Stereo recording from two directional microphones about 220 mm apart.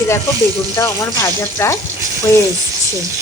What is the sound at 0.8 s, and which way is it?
Speech, 15° left (ahead or behind).